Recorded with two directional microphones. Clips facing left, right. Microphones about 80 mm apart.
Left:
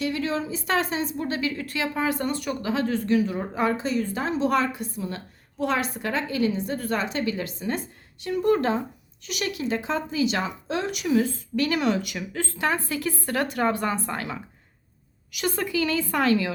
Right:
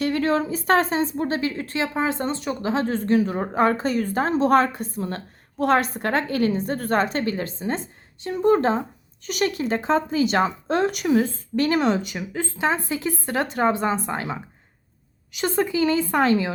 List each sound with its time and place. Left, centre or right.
0.0 s a woman's voice: right
9.2 s speech: right